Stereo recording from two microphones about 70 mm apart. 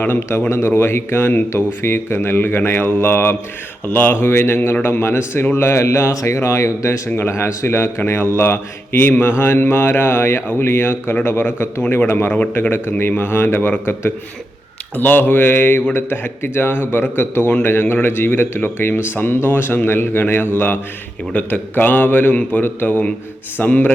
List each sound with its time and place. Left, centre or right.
0.2 s speech: left
7.1 s speech: left
12.3 s a man's voice: left